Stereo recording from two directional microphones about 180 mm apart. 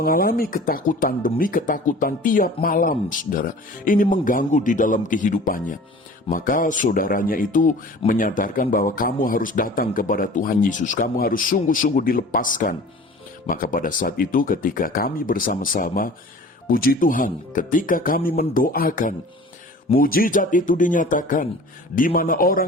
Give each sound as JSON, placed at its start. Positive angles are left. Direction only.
{"t": 0.0, "sound": "speech", "side_deg": 55}